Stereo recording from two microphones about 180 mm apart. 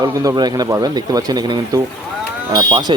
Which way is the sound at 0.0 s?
20° right (ahead or behind).